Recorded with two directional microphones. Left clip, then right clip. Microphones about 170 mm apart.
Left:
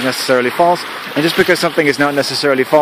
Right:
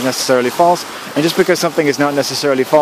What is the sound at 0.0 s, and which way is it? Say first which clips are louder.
Speech: even; centre (ahead or behind).